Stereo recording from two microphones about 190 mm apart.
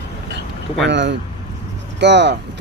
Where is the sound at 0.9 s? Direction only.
70° right (ahead or behind).